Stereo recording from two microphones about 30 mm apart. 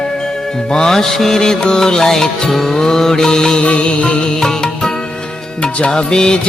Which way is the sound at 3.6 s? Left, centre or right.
Left.